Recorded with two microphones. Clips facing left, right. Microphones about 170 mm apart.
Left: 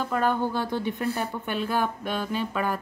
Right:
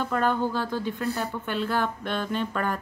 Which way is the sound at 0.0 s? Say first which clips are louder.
Even; 10° left (ahead or behind).